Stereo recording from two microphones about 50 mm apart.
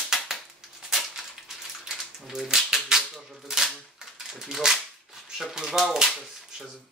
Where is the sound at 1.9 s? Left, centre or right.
Centre.